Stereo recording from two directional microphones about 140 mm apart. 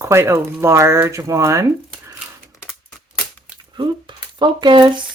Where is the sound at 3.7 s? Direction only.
35° right (ahead or behind).